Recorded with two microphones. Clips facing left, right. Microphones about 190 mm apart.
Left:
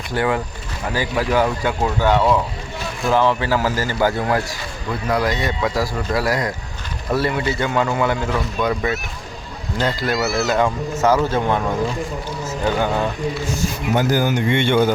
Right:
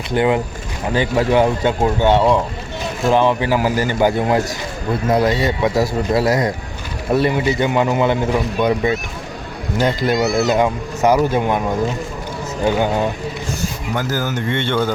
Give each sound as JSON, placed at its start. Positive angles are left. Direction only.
{"t": 0.1, "sound": "a man's voice", "side_deg": -20}
{"t": 10.2, "sound": "a child's voice", "side_deg": 0}
{"t": 10.5, "sound": "speech", "side_deg": -15}
{"t": 12.6, "sound": "speech", "side_deg": -15}
{"t": 13.9, "sound": "speech", "side_deg": 15}